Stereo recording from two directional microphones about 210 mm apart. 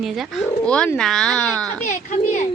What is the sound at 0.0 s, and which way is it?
Speech, centre (ahead or behind).